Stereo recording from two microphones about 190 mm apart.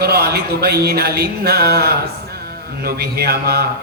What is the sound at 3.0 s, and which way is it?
Speech, 55° right (ahead or behind).